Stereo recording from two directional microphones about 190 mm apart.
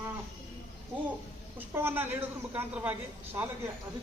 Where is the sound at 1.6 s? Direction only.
10° right (ahead or behind).